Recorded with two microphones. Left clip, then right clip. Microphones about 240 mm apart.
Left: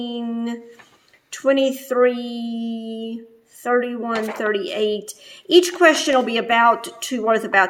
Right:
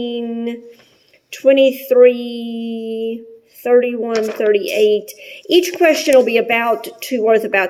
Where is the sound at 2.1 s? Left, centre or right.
Left.